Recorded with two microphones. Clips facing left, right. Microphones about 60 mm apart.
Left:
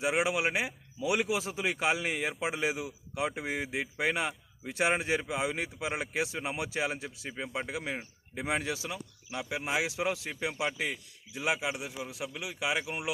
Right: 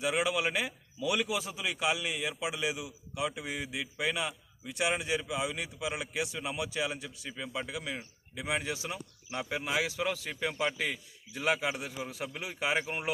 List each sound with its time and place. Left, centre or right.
0.0 s speech: left
8.9 s speech: right
10.0 s speech: centre
11.8 s speech: right